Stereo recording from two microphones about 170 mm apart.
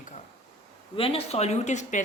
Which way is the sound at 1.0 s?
35° left (ahead or behind).